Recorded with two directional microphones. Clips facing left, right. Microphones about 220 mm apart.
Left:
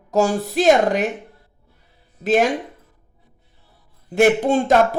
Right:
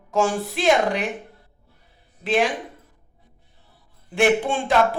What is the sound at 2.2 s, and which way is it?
Speech, 45° left (ahead or behind).